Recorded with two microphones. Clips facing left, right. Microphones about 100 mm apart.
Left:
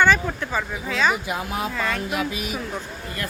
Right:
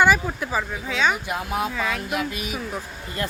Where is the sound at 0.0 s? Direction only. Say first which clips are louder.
Even; 10° right (ahead or behind).